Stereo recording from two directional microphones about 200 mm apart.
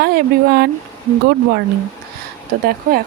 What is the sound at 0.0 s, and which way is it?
Speech, 50° right (ahead or behind).